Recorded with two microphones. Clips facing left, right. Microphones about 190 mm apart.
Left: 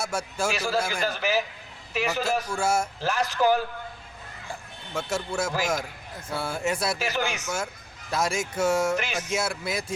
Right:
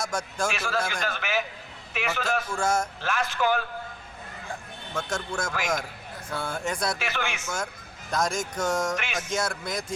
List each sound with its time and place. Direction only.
0.0 s speech: 5° left (ahead or behind)
0.5 s a man's voice: 40° left (ahead or behind)
0.8 s speech: 5° left (ahead or behind)
1.0 s a man's voice: 35° left (ahead or behind)
2.6 s speech: 10° left (ahead or behind)
3.0 s a man's voice: 35° left (ahead or behind)
4.9 s speech: 5° left (ahead or behind)
7.0 s a man's voice: 40° left (ahead or behind)
8.1 s speech: 5° left (ahead or behind)